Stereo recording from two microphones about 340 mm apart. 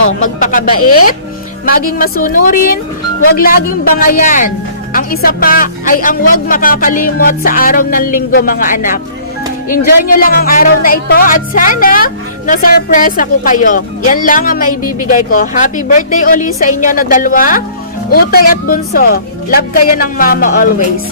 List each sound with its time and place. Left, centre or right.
0.1 s speech: left